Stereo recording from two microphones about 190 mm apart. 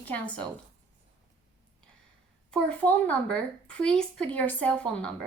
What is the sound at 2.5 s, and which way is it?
A woman's voice, 5° left (ahead or behind).